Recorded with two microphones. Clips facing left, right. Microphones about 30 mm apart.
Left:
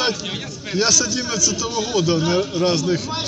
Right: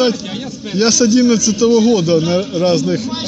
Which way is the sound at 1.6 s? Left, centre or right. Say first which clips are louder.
Right 13 dB; right.